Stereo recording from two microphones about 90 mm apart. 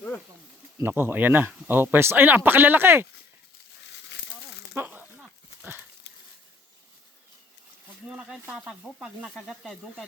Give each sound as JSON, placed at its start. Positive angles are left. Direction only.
{"t": 0.9, "sound": "speech", "side_deg": -20}
{"t": 4.8, "sound": "speech", "side_deg": -25}
{"t": 8.0, "sound": "speech", "side_deg": -10}